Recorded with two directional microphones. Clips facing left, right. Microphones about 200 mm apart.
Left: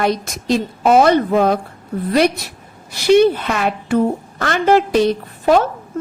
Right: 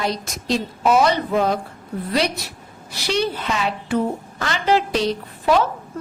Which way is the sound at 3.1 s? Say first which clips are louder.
Left 10 dB; 55° left (ahead or behind).